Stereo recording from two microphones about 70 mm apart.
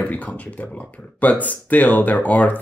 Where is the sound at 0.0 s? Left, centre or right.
Left.